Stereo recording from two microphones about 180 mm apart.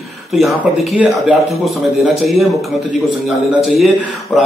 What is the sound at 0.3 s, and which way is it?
Speech, centre (ahead or behind).